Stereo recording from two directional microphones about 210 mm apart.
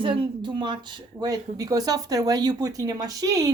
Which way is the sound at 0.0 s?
25° right (ahead or behind).